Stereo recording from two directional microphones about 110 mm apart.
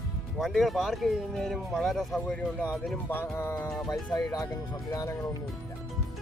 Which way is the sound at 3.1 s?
20° left (ahead or behind).